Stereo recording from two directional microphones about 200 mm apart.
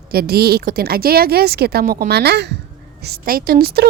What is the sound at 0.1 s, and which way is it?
Speech, 50° right (ahead or behind).